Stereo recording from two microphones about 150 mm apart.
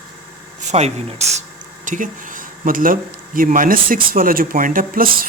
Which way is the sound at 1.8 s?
60° right (ahead or behind).